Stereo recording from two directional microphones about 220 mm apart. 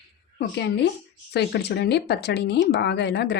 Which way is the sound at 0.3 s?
50° left (ahead or behind).